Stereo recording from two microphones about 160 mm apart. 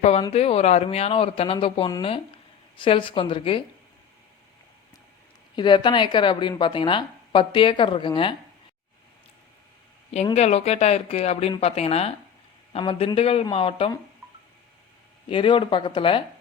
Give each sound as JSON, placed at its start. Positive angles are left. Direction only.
{"t": 0.0, "sound": "speech", "side_deg": 40}
{"t": 5.5, "sound": "a woman's voice", "side_deg": 30}
{"t": 10.3, "sound": "speech", "side_deg": 40}
{"t": 15.3, "sound": "speech", "side_deg": 35}